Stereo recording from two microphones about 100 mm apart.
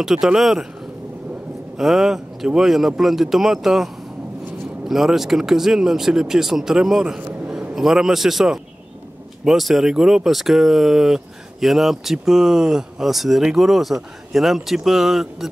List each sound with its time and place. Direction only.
0.0 s speech: 5° right (ahead or behind)
1.8 s a man's voice: 5° right (ahead or behind)